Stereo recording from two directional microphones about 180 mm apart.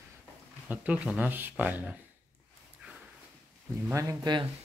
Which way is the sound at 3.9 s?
15° right (ahead or behind).